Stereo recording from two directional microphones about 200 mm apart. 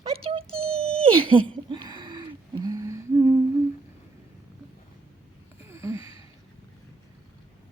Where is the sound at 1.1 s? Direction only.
25° right (ahead or behind).